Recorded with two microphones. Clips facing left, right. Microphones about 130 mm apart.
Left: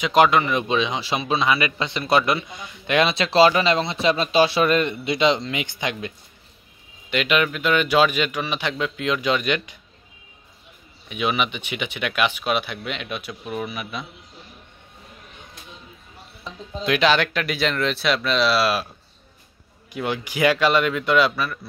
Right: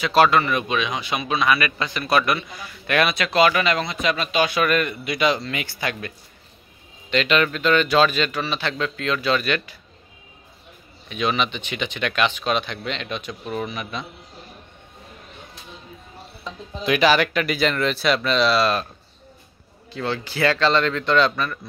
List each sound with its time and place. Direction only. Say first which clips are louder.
0.0 s a man's voice: even; 15° left (ahead or behind)
11.1 s speech: even; 10° left (ahead or behind)
16.8 s speech: right 1 dB; 5° right (ahead or behind)
19.9 s speech: even; 15° left (ahead or behind)